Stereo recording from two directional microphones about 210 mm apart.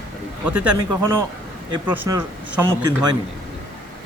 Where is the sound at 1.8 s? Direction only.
10° right (ahead or behind).